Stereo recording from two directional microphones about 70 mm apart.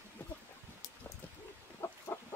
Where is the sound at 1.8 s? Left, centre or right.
Left.